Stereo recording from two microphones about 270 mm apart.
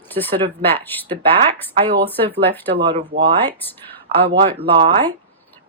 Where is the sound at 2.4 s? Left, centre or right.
Centre.